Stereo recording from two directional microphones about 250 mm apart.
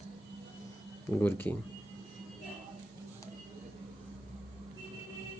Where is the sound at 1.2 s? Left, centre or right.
Centre.